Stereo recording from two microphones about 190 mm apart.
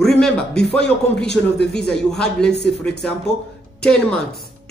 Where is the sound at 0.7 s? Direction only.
5° left (ahead or behind).